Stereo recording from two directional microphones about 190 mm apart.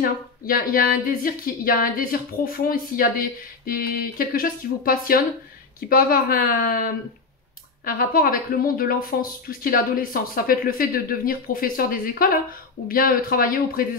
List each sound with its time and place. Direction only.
0.0 s speech: 50° left (ahead or behind)